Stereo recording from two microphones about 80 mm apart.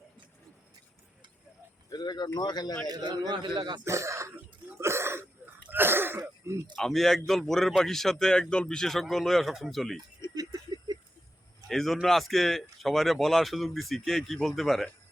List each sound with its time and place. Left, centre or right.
1.9 s speech: left
2.9 s a man's voice: right
3.8 s speech: right
4.8 s wheeze: right
5.6 s cough: right
6.7 s speech: centre
10.3 s a sound: right
11.7 s speech: centre